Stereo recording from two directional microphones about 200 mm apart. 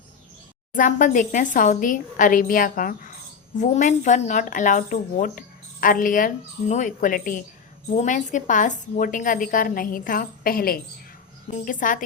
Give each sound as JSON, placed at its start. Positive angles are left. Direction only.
{"t": 0.8, "sound": "a woman's voice", "side_deg": 40}